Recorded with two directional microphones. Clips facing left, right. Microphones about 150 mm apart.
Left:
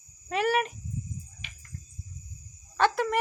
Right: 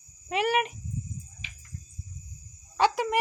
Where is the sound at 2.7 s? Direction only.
15° right (ahead or behind).